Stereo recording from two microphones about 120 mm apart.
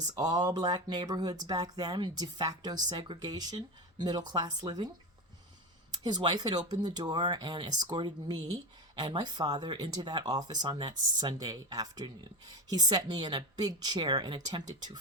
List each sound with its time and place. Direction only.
0.0 s speech: 35° right (ahead or behind)
5.9 s speech: 35° right (ahead or behind)